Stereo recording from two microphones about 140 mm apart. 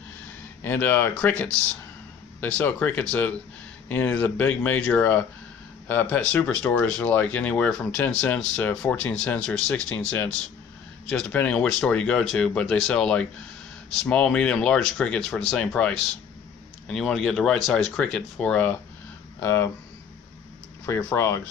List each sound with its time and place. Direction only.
0.7 s speech: 15° left (ahead or behind)
19.4 s speech: 20° left (ahead or behind)
20.8 s speech: 20° left (ahead or behind)